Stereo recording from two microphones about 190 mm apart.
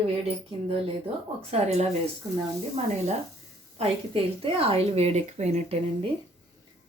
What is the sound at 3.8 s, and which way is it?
A woman's voice, 30° right (ahead or behind).